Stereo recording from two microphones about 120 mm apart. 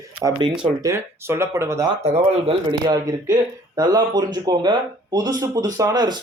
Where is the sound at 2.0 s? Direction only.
60° right (ahead or behind).